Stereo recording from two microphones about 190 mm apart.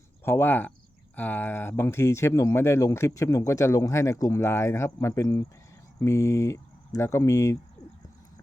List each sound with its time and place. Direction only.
0.3 s speech: 10° left (ahead or behind)